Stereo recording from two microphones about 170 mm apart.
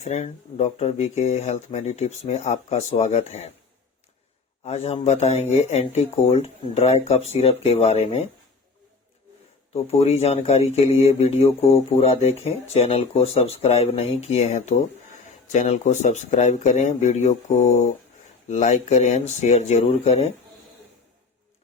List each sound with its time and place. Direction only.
0.0 s speech: 40° left (ahead or behind)
4.6 s speech: 35° left (ahead or behind)
9.7 s speech: 35° left (ahead or behind)